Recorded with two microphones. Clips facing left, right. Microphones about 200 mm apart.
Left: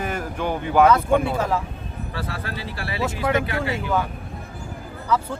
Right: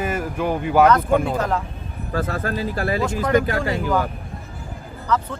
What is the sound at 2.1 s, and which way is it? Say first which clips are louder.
Speech: right 9 dB; 45° right (ahead or behind).